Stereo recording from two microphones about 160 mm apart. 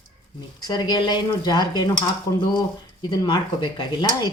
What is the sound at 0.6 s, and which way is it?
Speech, 25° left (ahead or behind).